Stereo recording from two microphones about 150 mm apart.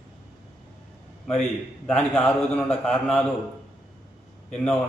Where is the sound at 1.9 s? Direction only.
10° left (ahead or behind).